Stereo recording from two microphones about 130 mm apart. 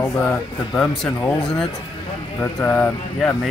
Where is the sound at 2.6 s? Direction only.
20° left (ahead or behind).